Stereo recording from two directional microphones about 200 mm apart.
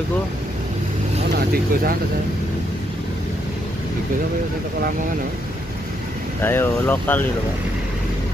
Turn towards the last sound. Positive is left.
turn(degrees=10)  # may be behind; listen again after turning